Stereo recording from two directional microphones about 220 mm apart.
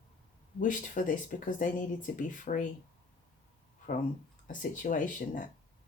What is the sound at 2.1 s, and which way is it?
Speech, 35° left (ahead or behind).